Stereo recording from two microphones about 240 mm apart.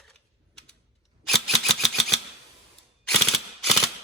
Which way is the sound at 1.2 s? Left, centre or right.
Centre.